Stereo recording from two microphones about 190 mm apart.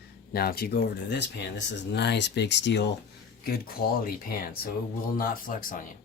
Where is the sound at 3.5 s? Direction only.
50° left (ahead or behind).